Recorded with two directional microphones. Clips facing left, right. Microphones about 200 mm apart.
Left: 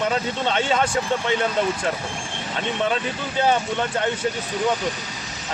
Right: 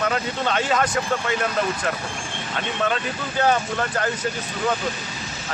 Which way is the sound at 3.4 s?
25° left (ahead or behind).